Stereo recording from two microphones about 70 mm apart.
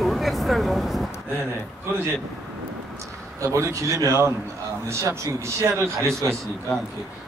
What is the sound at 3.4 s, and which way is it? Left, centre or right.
A man's voice, right.